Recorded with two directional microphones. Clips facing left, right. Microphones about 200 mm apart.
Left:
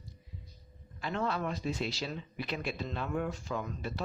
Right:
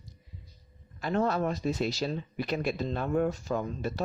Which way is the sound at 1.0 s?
40° right (ahead or behind).